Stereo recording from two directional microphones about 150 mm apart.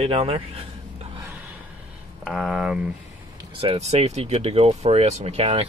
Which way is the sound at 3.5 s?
40° right (ahead or behind).